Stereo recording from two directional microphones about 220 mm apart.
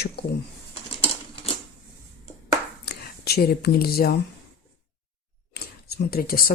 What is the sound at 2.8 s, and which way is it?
Speech, 45° left (ahead or behind).